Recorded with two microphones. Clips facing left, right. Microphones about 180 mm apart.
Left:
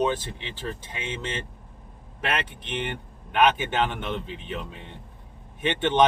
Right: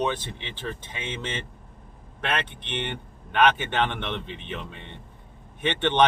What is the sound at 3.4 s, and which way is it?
A man's voice, 10° left (ahead or behind).